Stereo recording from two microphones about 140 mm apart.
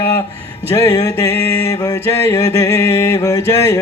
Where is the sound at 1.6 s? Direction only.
25° left (ahead or behind).